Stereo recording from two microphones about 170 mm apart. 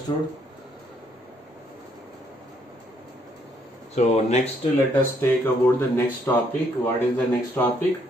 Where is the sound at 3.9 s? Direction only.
40° left (ahead or behind).